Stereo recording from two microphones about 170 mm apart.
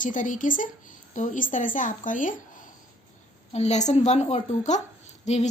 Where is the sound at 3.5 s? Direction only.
40° left (ahead or behind).